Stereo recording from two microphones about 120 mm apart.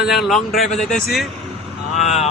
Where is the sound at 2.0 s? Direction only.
70° left (ahead or behind).